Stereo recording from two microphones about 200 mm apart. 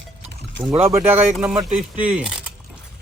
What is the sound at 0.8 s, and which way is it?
Speech, 10° right (ahead or behind).